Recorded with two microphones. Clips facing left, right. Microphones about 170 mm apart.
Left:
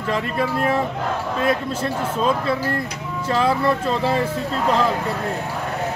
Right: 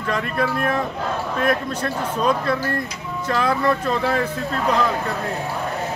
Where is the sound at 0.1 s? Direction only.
25° left (ahead or behind).